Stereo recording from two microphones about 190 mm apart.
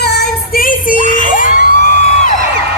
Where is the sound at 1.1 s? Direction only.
45° left (ahead or behind).